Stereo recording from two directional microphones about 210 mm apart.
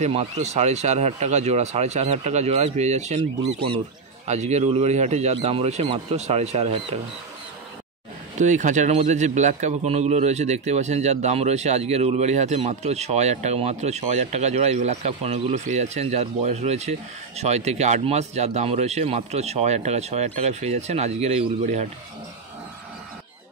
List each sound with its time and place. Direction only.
0.0 s a man's voice: 30° right (ahead or behind)
8.4 s a man's voice: 35° right (ahead or behind)